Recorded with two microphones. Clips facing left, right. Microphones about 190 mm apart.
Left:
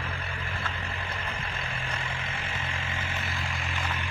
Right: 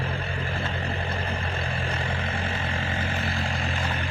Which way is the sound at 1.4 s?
35° right (ahead or behind).